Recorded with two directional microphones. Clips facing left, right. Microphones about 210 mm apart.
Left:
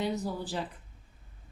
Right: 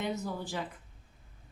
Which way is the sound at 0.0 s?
35° left (ahead or behind).